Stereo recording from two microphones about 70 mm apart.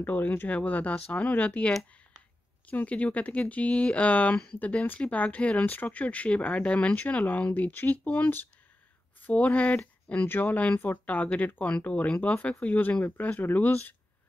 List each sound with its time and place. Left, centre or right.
0.0 s speech: left